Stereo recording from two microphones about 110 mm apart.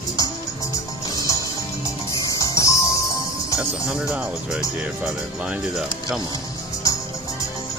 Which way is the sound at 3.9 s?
10° right (ahead or behind).